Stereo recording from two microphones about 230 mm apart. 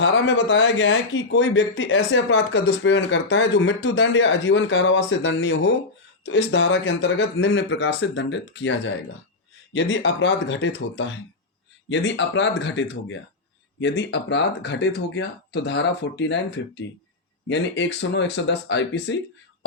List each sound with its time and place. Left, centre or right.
0.0 s speech: left